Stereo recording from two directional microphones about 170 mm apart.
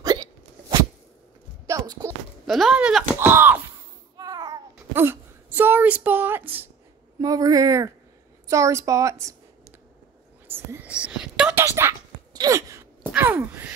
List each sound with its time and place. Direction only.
0.0 s hiccup: 25° right (ahead or behind)
1.7 s a sound: 20° right (ahead or behind)
2.4 s speech: centre (ahead or behind)
3.2 s a sound: 10° right (ahead or behind)
4.2 s babbling: 20° right (ahead or behind)
7.2 s a woman's voice: 20° right (ahead or behind)
10.5 s whispering: 10° right (ahead or behind)